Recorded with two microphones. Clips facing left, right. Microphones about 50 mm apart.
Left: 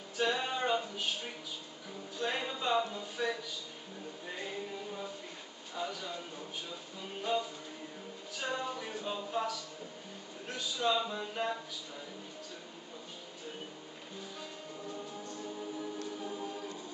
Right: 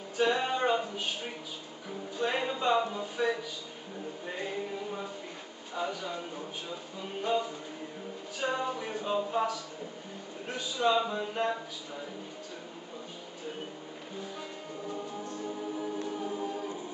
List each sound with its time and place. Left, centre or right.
0.2 s music: centre
1.9 s speech: centre
16.0 s music: right
16.3 s music: centre